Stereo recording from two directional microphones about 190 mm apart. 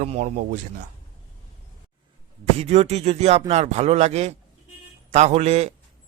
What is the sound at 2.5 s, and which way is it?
Speech, 35° right (ahead or behind).